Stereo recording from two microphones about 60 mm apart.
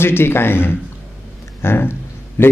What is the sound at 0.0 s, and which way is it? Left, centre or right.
A man's voice, left.